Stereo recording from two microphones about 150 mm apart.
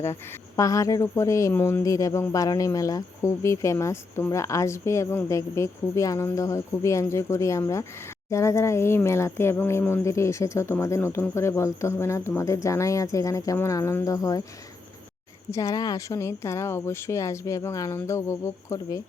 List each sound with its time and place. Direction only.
0.0 s speech: 20° left (ahead or behind)
15.4 s speech: 20° left (ahead or behind)